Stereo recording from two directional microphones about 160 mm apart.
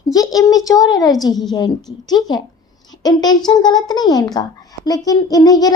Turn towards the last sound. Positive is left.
turn(degrees=25)  # may be behind; listen again after turning